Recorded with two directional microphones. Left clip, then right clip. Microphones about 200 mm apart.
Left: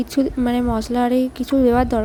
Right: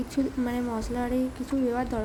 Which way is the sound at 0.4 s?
40° left (ahead or behind).